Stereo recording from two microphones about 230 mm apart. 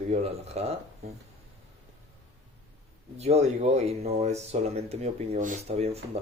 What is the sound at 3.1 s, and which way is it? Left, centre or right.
Speech, right.